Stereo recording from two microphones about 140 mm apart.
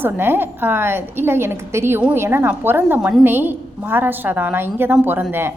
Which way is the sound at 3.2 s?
15° right (ahead or behind).